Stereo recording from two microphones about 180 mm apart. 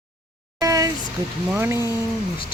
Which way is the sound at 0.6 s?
20° right (ahead or behind).